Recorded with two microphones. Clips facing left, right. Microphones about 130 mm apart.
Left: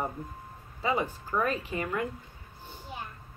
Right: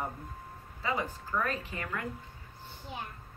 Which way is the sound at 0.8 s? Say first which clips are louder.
Left 4 dB; 20° left (ahead or behind).